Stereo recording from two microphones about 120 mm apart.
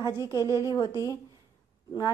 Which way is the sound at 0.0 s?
35° left (ahead or behind).